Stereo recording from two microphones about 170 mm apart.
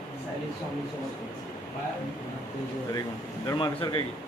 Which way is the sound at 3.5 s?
30° left (ahead or behind).